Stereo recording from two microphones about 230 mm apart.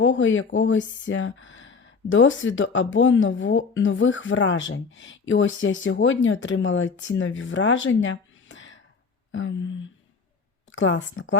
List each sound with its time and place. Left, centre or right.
0.0 s speech: left